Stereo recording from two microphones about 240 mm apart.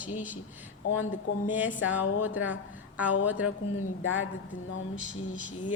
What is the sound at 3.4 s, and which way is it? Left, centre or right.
Speech, left.